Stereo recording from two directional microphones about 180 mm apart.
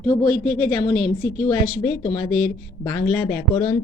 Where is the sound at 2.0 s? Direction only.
20° left (ahead or behind).